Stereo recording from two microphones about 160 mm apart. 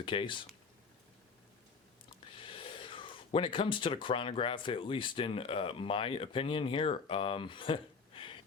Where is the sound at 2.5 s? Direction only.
35° left (ahead or behind).